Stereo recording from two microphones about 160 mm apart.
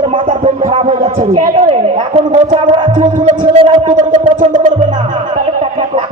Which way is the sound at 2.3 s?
55° right (ahead or behind).